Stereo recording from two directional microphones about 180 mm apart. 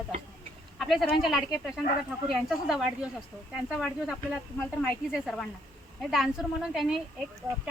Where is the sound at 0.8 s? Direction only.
Centre (ahead or behind).